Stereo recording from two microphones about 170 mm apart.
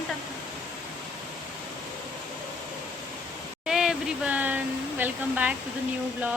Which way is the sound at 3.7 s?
5° right (ahead or behind).